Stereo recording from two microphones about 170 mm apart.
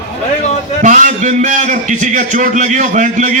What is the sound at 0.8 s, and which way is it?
A man's voice, 50° right (ahead or behind).